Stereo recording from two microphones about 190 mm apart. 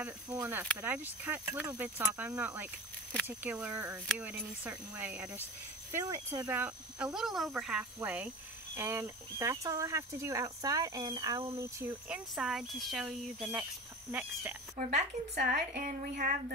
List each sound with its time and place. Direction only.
0.0 s speech: 10° right (ahead or behind)
12.1 s speech: centre (ahead or behind)
15.3 s a woman's voice: 55° right (ahead or behind)